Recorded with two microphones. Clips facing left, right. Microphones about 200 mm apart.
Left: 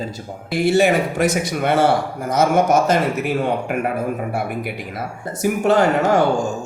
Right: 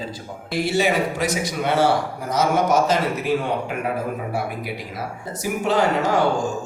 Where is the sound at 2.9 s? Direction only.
55° left (ahead or behind).